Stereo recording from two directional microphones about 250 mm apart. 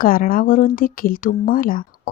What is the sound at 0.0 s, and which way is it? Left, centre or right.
Speech, left.